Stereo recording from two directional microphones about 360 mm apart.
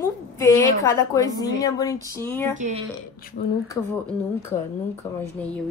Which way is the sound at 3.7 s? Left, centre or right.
Centre.